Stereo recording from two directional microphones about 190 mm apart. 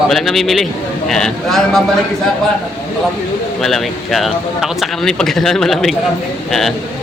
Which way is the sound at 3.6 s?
Centre (ahead or behind).